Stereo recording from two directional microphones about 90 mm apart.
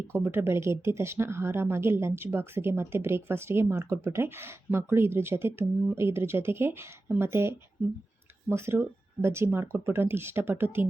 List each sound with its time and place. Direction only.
0.1 s a woman's voice: 25° right (ahead or behind)